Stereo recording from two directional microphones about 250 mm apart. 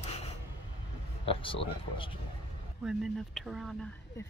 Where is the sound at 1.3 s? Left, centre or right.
Left.